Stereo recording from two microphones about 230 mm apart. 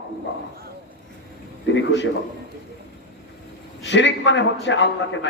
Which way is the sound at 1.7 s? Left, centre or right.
Left.